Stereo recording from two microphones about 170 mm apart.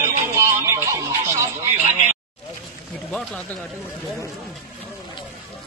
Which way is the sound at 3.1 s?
5° left (ahead or behind).